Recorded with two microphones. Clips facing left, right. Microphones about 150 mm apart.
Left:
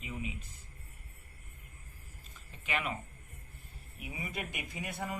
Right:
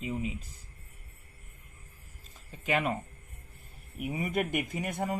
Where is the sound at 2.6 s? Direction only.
40° right (ahead or behind).